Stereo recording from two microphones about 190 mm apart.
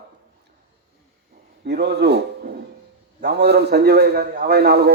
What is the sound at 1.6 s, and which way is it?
A man's voice, 60° right (ahead or behind).